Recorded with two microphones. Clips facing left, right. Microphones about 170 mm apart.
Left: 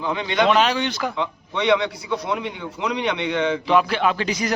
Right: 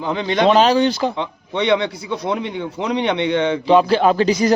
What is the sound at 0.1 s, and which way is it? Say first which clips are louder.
A man's voice: right 4 dB; 35° right (ahead or behind).